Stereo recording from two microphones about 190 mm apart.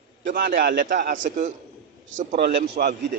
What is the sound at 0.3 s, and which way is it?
A man's voice, 55° right (ahead or behind).